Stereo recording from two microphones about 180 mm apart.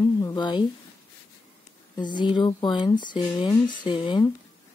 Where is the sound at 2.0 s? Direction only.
25° left (ahead or behind).